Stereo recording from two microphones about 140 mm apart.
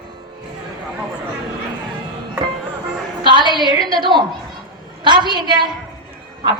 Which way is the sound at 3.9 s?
35° right (ahead or behind).